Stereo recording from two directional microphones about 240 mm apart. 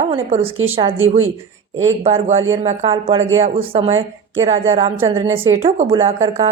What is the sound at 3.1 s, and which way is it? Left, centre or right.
Speech, right.